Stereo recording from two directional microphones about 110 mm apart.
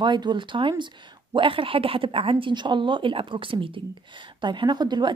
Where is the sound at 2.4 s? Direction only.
45° right (ahead or behind).